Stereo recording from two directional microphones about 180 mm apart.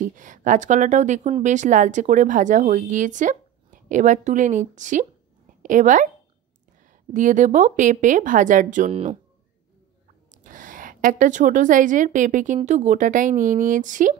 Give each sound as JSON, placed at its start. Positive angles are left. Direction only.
{"t": 0.0, "sound": "speech", "side_deg": -45}
{"t": 7.2, "sound": "speech", "side_deg": -45}
{"t": 10.3, "sound": "a woman's voice", "side_deg": -45}